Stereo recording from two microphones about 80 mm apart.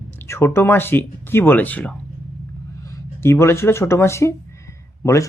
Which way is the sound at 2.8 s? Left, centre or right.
Left.